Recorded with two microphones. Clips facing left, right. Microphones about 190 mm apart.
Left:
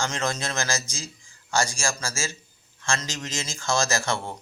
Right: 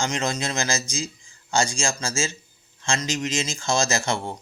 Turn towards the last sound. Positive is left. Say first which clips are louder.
# right 2 dB
turn(degrees=-20)  # may be behind; listen again after turning